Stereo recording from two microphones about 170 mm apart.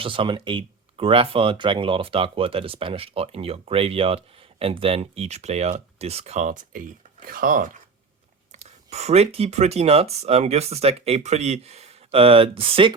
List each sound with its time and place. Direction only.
0.0 s speech: 30° right (ahead or behind); by 7.8 s 55° right (ahead or behind)
8.5 s speech: 40° right (ahead or behind)